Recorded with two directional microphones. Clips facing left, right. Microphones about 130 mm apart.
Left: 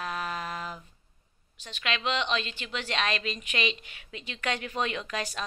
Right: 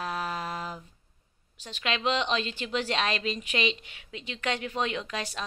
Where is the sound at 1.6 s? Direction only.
35° right (ahead or behind); by 5.0 s 20° right (ahead or behind).